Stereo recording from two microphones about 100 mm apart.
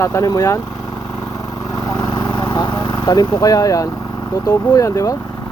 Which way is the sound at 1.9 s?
40° left (ahead or behind).